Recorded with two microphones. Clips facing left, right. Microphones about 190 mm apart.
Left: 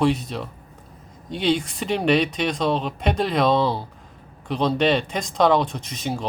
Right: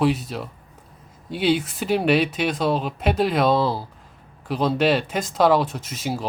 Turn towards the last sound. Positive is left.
turn(degrees=-5)  # may be behind; listen again after turning